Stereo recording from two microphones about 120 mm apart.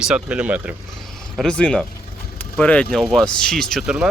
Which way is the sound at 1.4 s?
10° left (ahead or behind).